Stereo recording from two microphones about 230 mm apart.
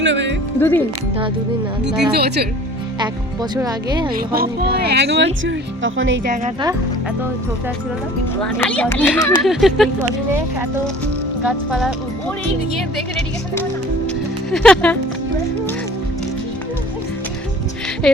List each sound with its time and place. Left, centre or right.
0.0 s speech: right
0.6 s speech: centre
2.1 s speech: right
3.5 s speech: centre
4.1 s speech: right
8.4 s speech: centre
11.4 s speech: centre
14.5 s speech: centre
18.0 s speech: centre